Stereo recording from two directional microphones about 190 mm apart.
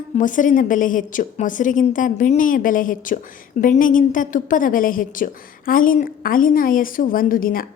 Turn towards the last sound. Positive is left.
turn(degrees=50)  # may be behind; listen again after turning